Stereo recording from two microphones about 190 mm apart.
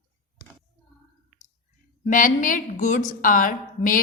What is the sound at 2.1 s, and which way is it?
A woman's voice, 45° left (ahead or behind).